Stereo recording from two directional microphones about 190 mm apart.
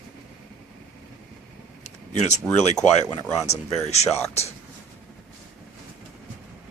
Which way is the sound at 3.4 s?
35° left (ahead or behind).